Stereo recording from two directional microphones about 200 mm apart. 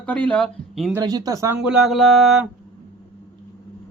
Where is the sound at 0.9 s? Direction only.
20° right (ahead or behind).